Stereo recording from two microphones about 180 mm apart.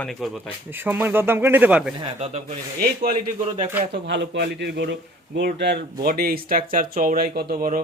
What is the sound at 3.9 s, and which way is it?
A man's voice, 70° right (ahead or behind).